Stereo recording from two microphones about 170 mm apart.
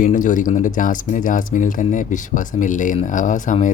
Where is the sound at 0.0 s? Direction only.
50° left (ahead or behind).